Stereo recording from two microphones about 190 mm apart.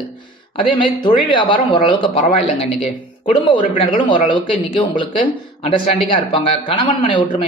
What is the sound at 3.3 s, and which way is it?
Speech, 30° left (ahead or behind).